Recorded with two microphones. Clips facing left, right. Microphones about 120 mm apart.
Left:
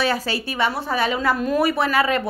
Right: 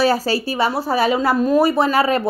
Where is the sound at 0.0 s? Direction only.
35° right (ahead or behind).